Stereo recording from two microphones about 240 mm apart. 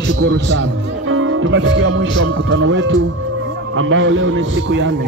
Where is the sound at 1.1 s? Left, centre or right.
Right.